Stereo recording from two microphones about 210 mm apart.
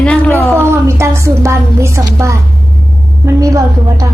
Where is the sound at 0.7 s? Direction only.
15° right (ahead or behind).